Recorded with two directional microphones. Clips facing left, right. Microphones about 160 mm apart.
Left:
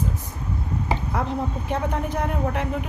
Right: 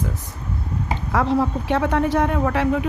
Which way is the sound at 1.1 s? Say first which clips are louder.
Right 11 dB; 90° right.